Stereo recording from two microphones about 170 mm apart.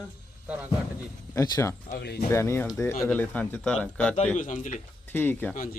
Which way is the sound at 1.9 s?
70° left (ahead or behind).